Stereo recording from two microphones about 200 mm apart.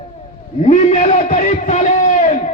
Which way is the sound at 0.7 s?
35° left (ahead or behind).